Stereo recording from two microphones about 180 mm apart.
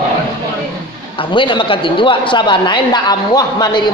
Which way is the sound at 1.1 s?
25° left (ahead or behind).